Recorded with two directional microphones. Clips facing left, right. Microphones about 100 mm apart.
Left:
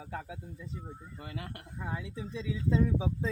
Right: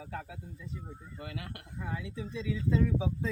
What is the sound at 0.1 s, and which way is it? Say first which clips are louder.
Speech: left 3 dB; 20° left (ahead or behind).